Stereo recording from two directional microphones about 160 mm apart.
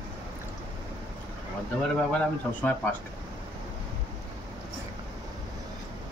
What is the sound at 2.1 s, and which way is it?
Speech, 10° left (ahead or behind).